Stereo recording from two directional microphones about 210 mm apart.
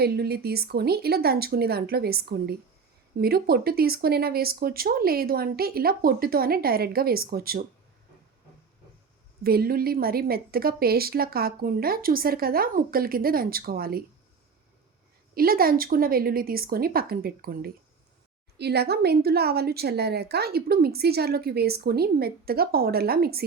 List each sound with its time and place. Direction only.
0.0 s a woman's voice: 50° right (ahead or behind)
9.4 s a woman's voice: 45° right (ahead or behind)
15.4 s a woman's voice: 45° right (ahead or behind)